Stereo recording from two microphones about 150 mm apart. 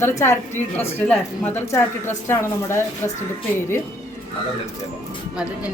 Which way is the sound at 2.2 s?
20° left (ahead or behind).